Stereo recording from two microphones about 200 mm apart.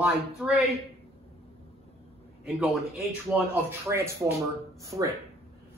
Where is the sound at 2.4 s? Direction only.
Centre (ahead or behind).